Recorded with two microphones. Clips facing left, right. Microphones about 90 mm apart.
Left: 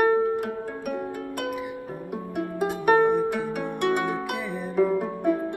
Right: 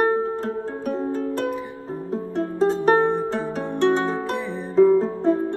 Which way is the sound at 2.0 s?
15° left (ahead or behind).